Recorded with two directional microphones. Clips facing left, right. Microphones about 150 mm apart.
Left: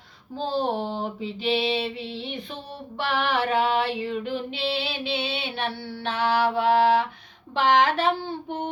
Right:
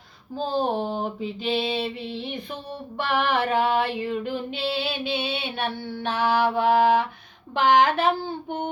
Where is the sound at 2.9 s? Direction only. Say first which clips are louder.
Right 1 dB; 45° right (ahead or behind).